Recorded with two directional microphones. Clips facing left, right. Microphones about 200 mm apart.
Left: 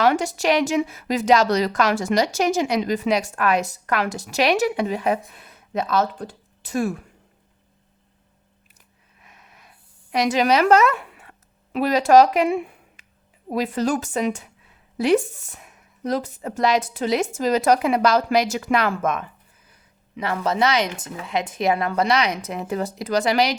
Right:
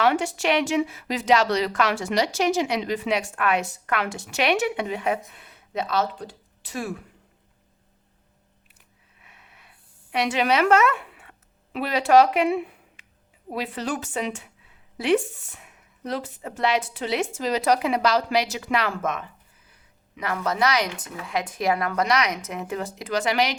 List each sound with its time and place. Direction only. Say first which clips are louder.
0.0 s a woman's voice: left 3 dB; 40° left (ahead or behind)
9.2 s a sound: left 3 dB; 40° left (ahead or behind)
13.5 s a woman's voice: left 6 dB; 40° left (ahead or behind)
20.1 s a woman's voice: left 3 dB; 30° left (ahead or behind)